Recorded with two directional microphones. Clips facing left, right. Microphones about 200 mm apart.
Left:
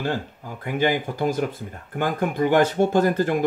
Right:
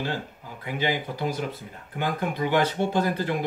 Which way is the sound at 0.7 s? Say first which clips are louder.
Left 5 dB; 50° left (ahead or behind).